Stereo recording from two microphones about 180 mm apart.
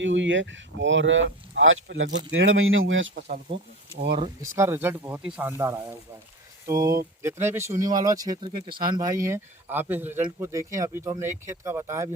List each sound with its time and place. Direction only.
0.0 s speech: 90° right
4.1 s speech: 25° right (ahead or behind)
4.4 s speech: 15° right (ahead or behind)